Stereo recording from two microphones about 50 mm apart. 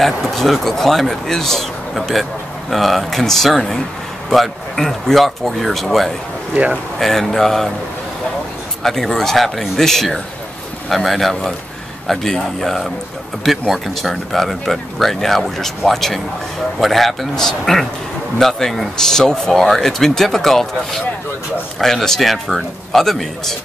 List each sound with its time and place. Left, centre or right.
0.0 s speech: centre
6.5 s speech: right
7.0 s speech: centre
8.8 s a man's voice: centre
13.4 s speech: centre